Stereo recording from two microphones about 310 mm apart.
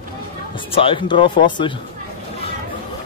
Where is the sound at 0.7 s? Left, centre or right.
Centre.